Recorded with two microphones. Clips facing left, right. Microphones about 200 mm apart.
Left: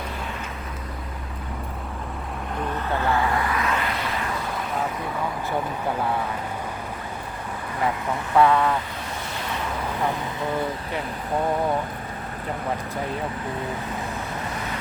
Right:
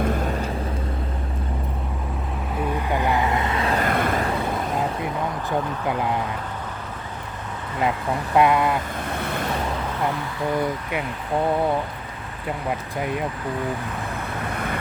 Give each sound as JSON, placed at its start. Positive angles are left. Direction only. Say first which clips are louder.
{"t": 2.6, "sound": "vehicle", "louder": "right 3 dB", "side_deg": -15}
{"t": 3.8, "sound": "a sound", "louder": "right 6 dB", "side_deg": -50}
{"t": 8.4, "sound": "speech", "louder": "even", "side_deg": -15}
{"t": 9.1, "sound": "waves", "louder": "right 7 dB", "side_deg": -60}
{"t": 14.5, "sound": "vehicle", "louder": "right 3 dB", "side_deg": -55}